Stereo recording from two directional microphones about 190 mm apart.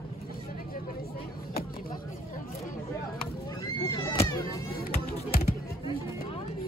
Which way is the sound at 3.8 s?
15° left (ahead or behind).